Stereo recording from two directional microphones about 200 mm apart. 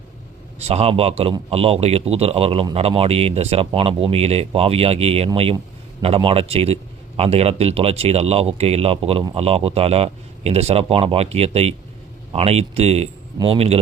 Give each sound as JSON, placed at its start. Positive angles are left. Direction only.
{"t": 0.6, "sound": "a man's voice", "side_deg": -30}